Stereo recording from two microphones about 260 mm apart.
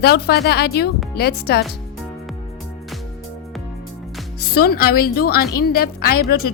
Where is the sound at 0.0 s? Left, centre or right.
Left.